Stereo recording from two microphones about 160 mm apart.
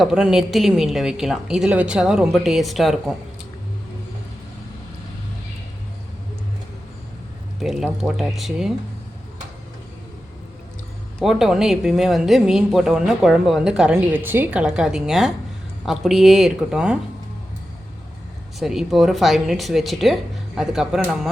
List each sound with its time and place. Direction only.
0.0 s a woman's voice: 5° right (ahead or behind)
7.6 s a woman's voice: centre (ahead or behind)
11.2 s a woman's voice: centre (ahead or behind)
18.6 s a woman's voice: centre (ahead or behind)